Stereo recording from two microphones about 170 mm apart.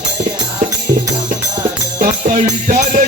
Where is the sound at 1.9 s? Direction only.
50° right (ahead or behind).